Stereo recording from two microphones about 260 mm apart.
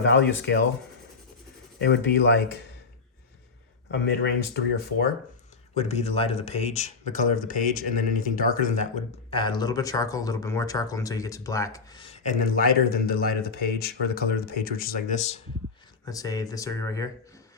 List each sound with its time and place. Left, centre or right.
0.0 s speech: left
1.8 s speech: left
4.2 s speech: left
5.7 s speech: left
9.3 s speech: centre
16.0 s speech: centre